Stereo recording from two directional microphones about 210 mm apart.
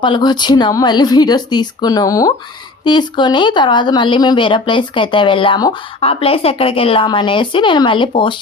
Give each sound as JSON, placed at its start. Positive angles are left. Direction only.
{"t": 0.0, "sound": "speech", "side_deg": 20}